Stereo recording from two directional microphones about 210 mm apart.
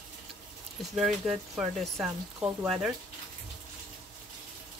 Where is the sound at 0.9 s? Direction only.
Centre (ahead or behind).